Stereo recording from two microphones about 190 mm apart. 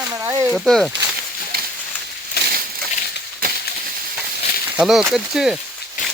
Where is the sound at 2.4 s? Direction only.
55° left (ahead or behind).